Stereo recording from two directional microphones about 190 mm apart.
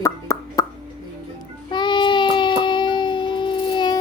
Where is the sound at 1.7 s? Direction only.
25° left (ahead or behind).